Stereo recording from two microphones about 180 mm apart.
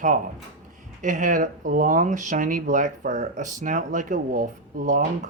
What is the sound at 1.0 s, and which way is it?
A man's voice, 45° right (ahead or behind).